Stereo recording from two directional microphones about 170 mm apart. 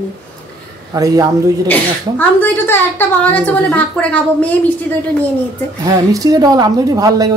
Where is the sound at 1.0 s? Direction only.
20° right (ahead or behind).